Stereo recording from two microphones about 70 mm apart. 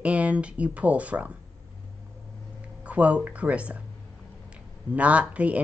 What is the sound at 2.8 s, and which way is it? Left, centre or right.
Speech, centre.